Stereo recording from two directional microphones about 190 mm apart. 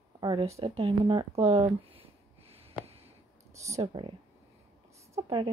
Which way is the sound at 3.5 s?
15° right (ahead or behind).